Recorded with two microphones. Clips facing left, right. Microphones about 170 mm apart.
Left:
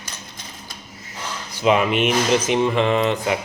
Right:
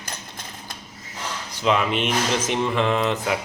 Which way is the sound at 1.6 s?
10° left (ahead or behind).